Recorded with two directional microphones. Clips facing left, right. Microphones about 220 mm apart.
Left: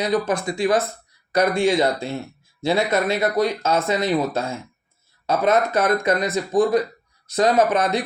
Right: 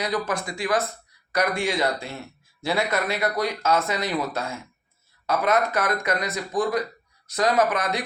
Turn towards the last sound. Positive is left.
turn(degrees=25)  # may be behind; listen again after turning